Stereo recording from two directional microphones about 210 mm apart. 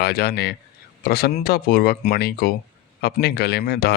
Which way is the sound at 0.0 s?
50° left (ahead or behind).